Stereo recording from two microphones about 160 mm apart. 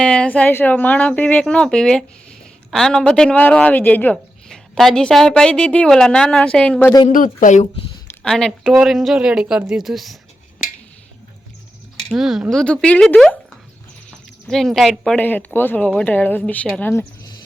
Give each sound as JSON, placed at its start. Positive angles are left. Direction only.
{"t": 0.0, "sound": "speech", "side_deg": 5}
{"t": 7.1, "sound": "speech", "side_deg": 55}
{"t": 8.2, "sound": "speech", "side_deg": 5}
{"t": 12.0, "sound": "speech", "side_deg": 0}